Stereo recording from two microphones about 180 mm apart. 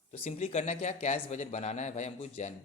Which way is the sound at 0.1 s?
35° left (ahead or behind).